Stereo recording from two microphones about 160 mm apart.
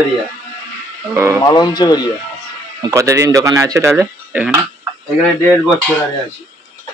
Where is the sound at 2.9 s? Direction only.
20° right (ahead or behind).